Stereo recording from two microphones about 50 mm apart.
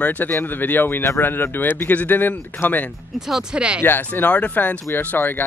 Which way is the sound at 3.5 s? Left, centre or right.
Centre.